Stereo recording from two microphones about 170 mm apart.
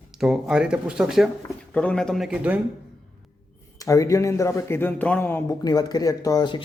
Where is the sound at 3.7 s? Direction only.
20° left (ahead or behind).